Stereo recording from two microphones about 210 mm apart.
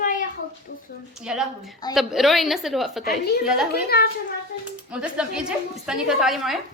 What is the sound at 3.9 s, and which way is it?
Speech, 50° left (ahead or behind).